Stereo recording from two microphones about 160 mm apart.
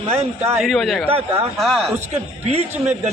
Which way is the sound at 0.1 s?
40° right (ahead or behind).